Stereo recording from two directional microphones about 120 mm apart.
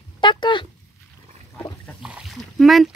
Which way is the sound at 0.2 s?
40° left (ahead or behind).